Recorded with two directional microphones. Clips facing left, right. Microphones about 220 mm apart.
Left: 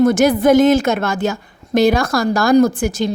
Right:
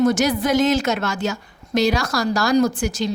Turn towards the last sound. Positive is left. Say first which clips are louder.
# left 5 dB
turn(degrees=55)  # may be behind; listen again after turning